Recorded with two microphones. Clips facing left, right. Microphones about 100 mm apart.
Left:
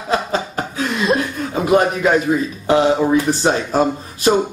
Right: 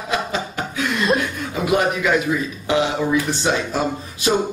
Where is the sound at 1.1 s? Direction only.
40° left (ahead or behind).